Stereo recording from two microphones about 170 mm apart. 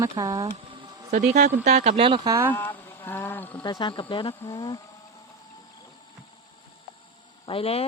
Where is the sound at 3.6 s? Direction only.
25° left (ahead or behind).